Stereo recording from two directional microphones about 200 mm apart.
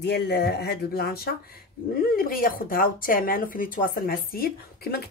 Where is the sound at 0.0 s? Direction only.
55° left (ahead or behind).